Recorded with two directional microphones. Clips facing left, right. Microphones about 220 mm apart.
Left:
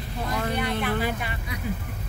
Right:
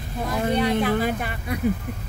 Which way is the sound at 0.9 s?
45° right (ahead or behind).